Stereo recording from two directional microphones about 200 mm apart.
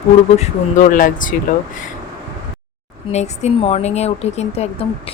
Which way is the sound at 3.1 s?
35° left (ahead or behind).